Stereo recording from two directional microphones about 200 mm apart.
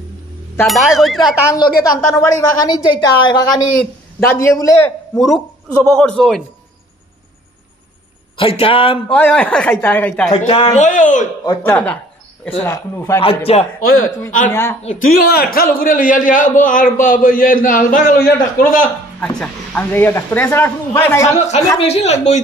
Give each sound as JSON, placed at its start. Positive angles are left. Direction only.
{"t": 0.7, "sound": "speech", "side_deg": 0}
{"t": 1.5, "sound": "a woman's voice", "side_deg": 20}
{"t": 5.9, "sound": "speech", "side_deg": 5}
{"t": 8.4, "sound": "a woman's voice", "side_deg": 25}
{"t": 9.1, "sound": "a man's voice", "side_deg": 5}
{"t": 10.3, "sound": "a man's voice", "side_deg": 30}
{"t": 11.4, "sound": "a man's voice", "side_deg": 10}
{"t": 13.5, "sound": "a man's voice", "side_deg": 30}
{"t": 13.8, "sound": "a man's voice", "side_deg": 45}
{"t": 14.5, "sound": "a man's voice", "side_deg": 15}
{"t": 14.8, "sound": "a man's voice", "side_deg": 40}
{"t": 19.1, "sound": "a man's voice", "side_deg": 5}
{"t": 21.3, "sound": "a man's voice", "side_deg": 35}